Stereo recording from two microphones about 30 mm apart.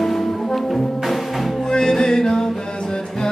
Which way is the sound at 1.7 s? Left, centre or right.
Centre.